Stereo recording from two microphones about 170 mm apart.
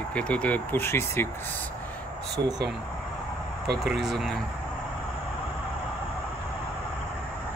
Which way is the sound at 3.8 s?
Centre (ahead or behind).